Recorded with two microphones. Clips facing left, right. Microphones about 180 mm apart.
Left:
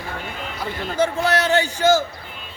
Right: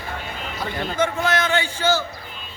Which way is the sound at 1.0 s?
35° left (ahead or behind).